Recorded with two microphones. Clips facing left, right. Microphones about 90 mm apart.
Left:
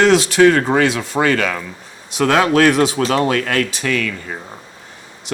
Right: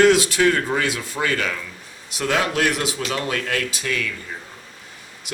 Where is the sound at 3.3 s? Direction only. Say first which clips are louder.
Left 7 dB; 65° left (ahead or behind).